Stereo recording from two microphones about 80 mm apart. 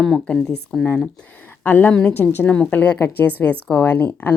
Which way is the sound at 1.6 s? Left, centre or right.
Left.